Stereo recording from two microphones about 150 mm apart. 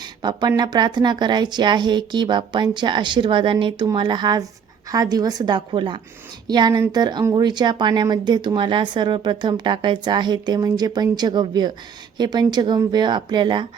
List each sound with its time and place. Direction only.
0.0 s speech: 30° right (ahead or behind)